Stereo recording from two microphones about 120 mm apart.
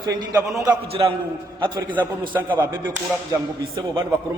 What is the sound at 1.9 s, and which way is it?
Speech, 40° right (ahead or behind).